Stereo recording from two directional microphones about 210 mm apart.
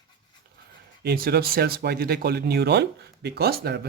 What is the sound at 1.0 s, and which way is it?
Speech, 50° right (ahead or behind).